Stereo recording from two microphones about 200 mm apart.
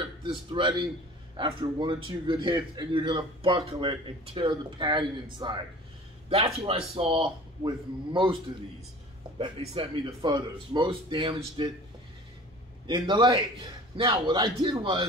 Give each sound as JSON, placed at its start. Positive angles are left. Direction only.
{"t": 0.2, "sound": "a man's voice", "side_deg": -25}
{"t": 9.4, "sound": "a man's voice", "side_deg": -25}
{"t": 12.8, "sound": "a man's voice", "side_deg": -25}